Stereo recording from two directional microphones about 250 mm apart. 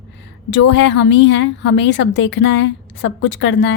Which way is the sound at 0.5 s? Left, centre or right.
Left.